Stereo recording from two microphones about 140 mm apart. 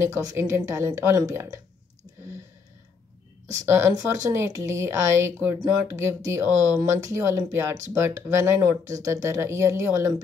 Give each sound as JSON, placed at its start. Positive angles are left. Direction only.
{"t": 0.0, "sound": "speech", "side_deg": -25}
{"t": 3.6, "sound": "speech", "side_deg": -20}